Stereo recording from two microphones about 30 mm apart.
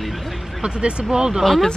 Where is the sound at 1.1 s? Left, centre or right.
Centre.